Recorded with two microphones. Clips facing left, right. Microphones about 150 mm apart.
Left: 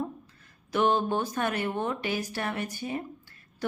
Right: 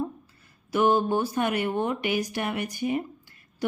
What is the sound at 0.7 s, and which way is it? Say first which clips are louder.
Speech: right 3 dB; 10° right (ahead or behind).